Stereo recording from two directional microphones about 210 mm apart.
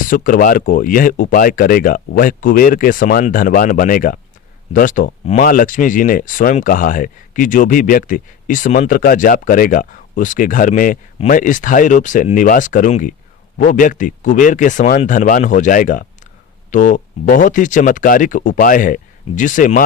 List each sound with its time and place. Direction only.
0.0 s speech: 40° left (ahead or behind)